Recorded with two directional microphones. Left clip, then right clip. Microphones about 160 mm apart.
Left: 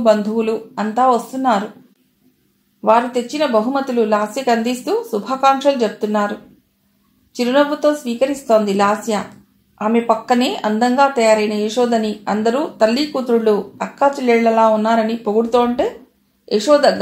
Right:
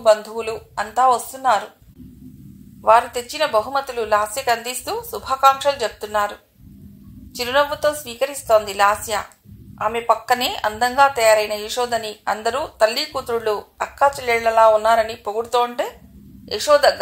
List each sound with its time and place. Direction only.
0.0 s speech: 45° right (ahead or behind)
2.8 s speech: 45° right (ahead or behind)
7.3 s speech: 40° right (ahead or behind)